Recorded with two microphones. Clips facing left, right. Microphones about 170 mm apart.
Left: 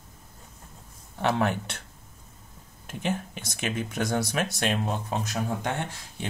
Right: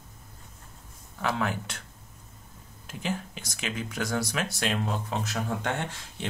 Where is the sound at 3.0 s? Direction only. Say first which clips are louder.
Left 3 dB; 20° left (ahead or behind).